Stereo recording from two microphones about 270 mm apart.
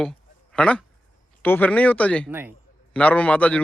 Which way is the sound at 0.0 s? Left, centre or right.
Centre.